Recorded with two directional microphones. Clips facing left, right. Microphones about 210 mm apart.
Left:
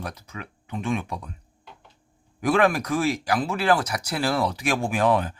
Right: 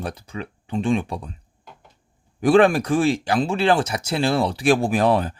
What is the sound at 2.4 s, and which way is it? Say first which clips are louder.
Speech: right 6 dB; 30° right (ahead or behind).